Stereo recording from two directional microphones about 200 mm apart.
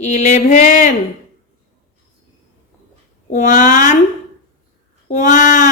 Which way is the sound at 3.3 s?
40° left (ahead or behind).